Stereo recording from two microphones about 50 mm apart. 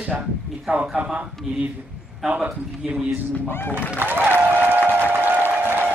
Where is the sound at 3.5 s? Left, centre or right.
Left.